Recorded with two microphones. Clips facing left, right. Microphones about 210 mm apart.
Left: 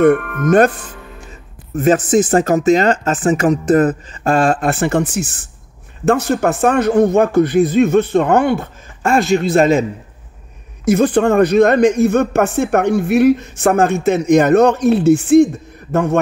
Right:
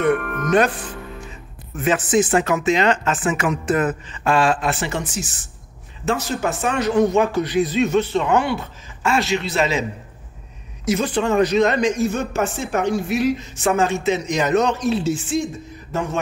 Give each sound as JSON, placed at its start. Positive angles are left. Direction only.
{"t": 0.0, "sound": "speech", "side_deg": 50}
{"t": 1.8, "sound": "speech", "side_deg": 40}
{"t": 10.9, "sound": "speech", "side_deg": 55}